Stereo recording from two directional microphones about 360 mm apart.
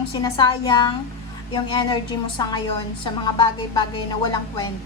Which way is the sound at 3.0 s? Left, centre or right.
Centre.